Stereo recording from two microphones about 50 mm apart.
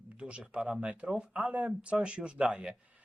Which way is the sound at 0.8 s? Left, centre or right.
Right.